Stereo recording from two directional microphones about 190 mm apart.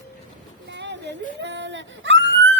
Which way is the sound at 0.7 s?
70° right (ahead or behind).